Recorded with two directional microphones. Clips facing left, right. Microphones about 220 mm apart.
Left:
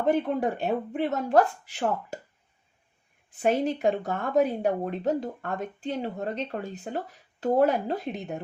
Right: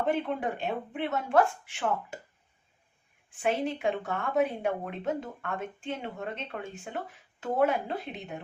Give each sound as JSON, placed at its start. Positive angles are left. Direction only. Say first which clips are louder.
{"t": 0.0, "sound": "speech", "louder": "left 5 dB", "side_deg": 40}
{"t": 3.2, "sound": "speech", "louder": "left 5 dB", "side_deg": 40}